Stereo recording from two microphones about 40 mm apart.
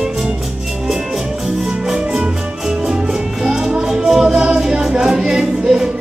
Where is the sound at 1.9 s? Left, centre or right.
Centre.